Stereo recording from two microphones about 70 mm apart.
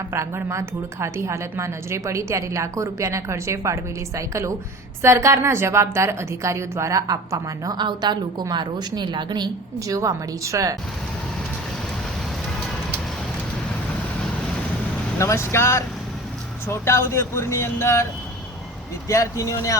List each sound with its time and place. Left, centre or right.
0.1 s a woman's voice: right
7.8 s a woman's voice: right
9.8 s a woman's voice: right
15.2 s speech: left
16.8 s speech: left
19.0 s speech: left